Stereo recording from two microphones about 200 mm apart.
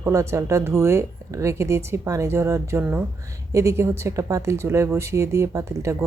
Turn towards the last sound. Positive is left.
turn(degrees=-15)  # may be behind; listen again after turning